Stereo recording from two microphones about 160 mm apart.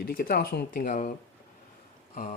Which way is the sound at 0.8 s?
55° left (ahead or behind).